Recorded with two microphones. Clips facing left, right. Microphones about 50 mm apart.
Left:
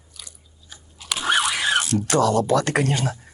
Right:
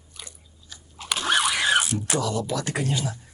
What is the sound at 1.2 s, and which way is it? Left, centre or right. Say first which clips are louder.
Dog: left 2 dB; centre.